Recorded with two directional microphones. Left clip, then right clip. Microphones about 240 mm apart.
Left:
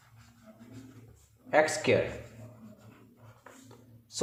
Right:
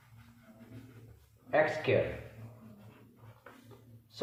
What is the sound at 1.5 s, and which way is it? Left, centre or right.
Speech, left.